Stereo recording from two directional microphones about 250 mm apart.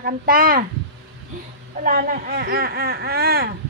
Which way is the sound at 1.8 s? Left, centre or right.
Right.